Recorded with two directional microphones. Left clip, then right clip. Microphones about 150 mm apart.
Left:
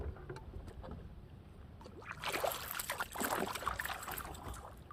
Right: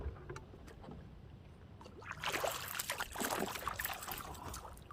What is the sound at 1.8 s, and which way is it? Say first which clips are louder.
Boat: right 1 dB; 15° left (ahead or behind).